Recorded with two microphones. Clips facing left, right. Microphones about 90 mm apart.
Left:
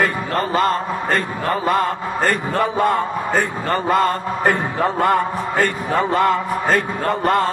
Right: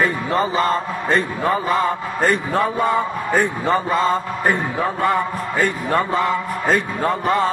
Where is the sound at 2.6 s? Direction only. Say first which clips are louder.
Left 2 dB; 70° left (ahead or behind).